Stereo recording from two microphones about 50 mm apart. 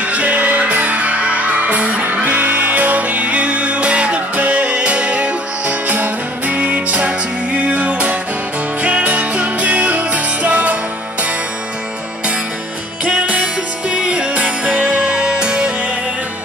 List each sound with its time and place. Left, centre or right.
0.0 s music: right
2.0 s music: right
13.0 s music: right